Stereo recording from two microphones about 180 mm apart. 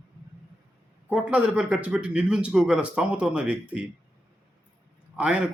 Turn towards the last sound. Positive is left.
turn(degrees=-5)  # may be behind; listen again after turning